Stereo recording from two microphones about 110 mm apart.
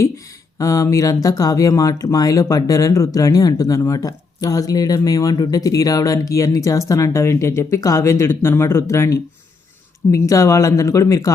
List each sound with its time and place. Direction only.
0.6 s speech: 30° left (ahead or behind)